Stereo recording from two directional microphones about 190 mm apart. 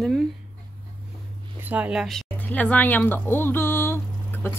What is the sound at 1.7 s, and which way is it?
Speech, 5° right (ahead or behind).